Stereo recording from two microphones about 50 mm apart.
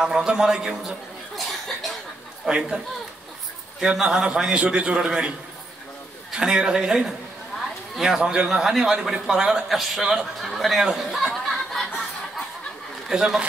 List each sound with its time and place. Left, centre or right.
0.0 s a man's voice: centre
1.3 s cough: centre
2.4 s a man's voice: centre
3.8 s a man's voice: centre
6.3 s a man's voice: centre
7.5 s a sound: centre
8.2 s a man's voice: centre
11.0 s snicker: centre
13.1 s a man's voice: centre